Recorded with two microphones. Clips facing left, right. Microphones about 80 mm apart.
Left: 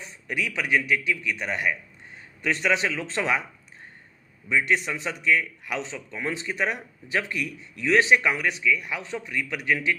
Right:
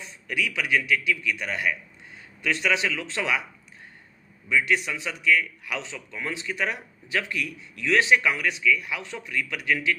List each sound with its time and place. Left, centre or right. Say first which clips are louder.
0.0 s a man's voice: right 1 dB; left
4.4 s a man's voice: even; left